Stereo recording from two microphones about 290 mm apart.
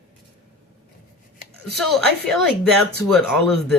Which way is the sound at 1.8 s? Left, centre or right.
Centre.